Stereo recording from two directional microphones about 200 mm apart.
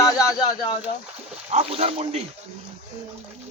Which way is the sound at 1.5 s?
30° right (ahead or behind).